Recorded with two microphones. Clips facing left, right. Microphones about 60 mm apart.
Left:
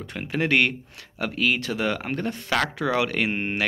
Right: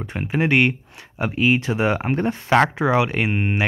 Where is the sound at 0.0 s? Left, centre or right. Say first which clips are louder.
Right 4 dB; centre.